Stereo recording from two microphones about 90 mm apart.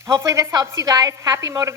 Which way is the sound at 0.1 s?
35° right (ahead or behind).